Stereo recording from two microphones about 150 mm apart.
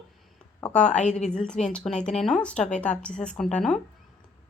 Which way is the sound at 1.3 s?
5° left (ahead or behind).